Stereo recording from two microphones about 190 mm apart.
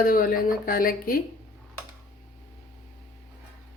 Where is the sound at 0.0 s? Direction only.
45° left (ahead or behind).